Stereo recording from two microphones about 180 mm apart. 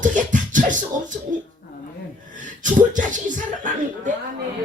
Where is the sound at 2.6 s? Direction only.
45° right (ahead or behind).